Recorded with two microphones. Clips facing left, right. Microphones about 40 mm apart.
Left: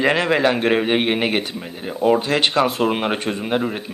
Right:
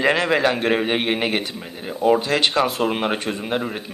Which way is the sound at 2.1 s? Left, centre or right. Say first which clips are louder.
Left 1 dB; left.